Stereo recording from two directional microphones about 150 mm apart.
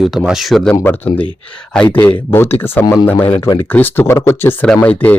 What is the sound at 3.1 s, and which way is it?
Speech, 40° left (ahead or behind).